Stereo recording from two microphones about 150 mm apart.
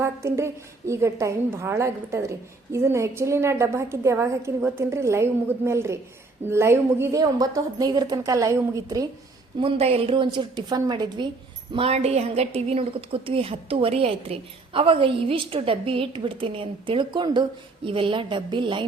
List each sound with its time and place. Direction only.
0.0 s a woman's voice: 20° right (ahead or behind)
9.6 s a woman's voice: 40° right (ahead or behind)
11.7 s a woman's voice: 40° right (ahead or behind)